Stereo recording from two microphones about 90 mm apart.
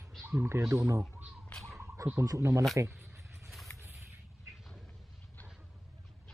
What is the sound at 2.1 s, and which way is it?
Speech, 35° right (ahead or behind).